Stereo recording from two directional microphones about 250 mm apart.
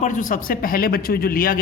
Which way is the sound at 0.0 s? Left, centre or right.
Left.